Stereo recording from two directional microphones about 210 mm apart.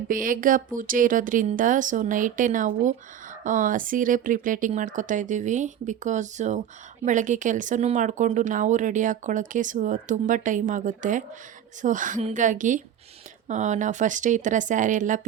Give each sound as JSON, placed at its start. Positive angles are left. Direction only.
{"t": 0.1, "sound": "speech", "side_deg": -40}